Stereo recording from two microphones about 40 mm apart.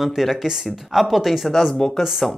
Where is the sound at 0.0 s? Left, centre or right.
Centre.